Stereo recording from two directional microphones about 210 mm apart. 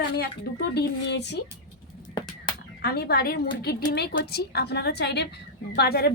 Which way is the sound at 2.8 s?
50° left (ahead or behind).